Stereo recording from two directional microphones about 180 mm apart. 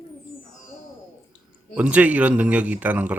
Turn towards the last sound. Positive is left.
turn(degrees=-10)  # may be behind; listen again after turning